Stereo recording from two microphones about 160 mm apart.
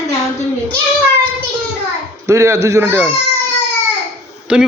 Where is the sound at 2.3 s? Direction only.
15° right (ahead or behind).